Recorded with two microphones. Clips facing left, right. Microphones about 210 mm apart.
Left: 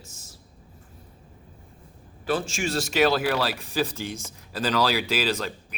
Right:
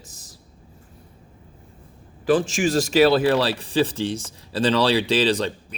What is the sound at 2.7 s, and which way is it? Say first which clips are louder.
Speech: right 5 dB; 40° right (ahead or behind).